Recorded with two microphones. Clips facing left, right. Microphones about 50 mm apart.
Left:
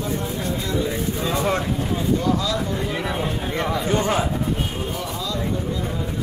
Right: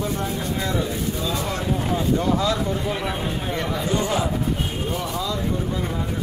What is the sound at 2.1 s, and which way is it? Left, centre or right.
Speech, right.